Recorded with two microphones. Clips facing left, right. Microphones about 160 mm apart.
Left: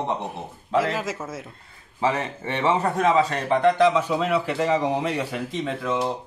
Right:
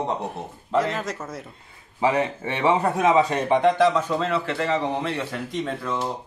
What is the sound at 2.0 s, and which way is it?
A man's voice, 15° right (ahead or behind).